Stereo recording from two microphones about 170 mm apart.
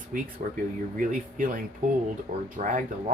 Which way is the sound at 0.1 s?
55° right (ahead or behind).